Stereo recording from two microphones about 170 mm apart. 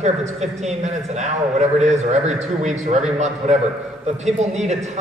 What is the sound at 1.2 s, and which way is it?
A man's voice, 40° right (ahead or behind).